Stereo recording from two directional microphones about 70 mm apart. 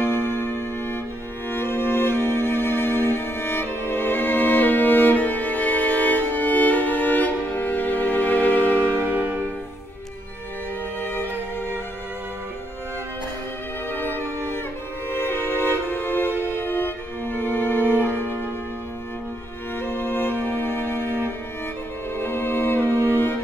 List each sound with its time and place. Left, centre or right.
0.0 s music: left
8.9 s music: right
11.0 s music: left
15.0 s music: left
19.8 s music: left